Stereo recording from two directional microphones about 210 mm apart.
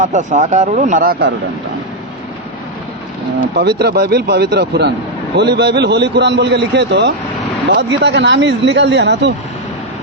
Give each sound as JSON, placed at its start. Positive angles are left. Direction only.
{"t": 0.0, "sound": "speech", "side_deg": -35}
{"t": 3.5, "sound": "speech", "side_deg": -50}